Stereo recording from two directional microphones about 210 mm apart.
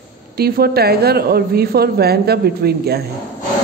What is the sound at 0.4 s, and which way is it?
A woman's voice, 45° right (ahead or behind).